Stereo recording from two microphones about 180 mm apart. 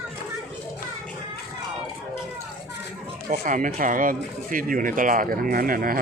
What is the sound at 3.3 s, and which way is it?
Speech, 45° right (ahead or behind).